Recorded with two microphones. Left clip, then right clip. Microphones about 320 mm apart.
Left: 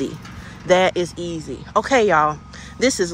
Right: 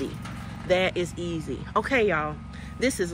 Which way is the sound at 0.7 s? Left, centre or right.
Left.